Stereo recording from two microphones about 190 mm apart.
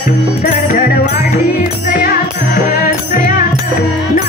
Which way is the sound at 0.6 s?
45° left (ahead or behind).